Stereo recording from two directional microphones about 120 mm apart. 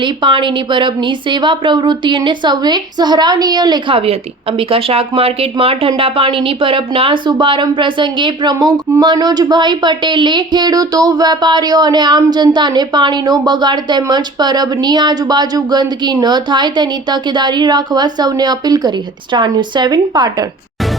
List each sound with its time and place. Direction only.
0.0 s a woman's voice: 45° right (ahead or behind)
3.9 s a woman's voice: 50° right (ahead or behind); by 20.5 s 35° right (ahead or behind)